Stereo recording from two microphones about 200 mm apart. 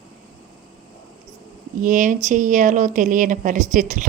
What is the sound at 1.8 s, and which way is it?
Speech, 40° right (ahead or behind).